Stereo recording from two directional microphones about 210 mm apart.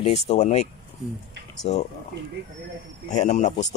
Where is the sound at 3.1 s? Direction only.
35° left (ahead or behind).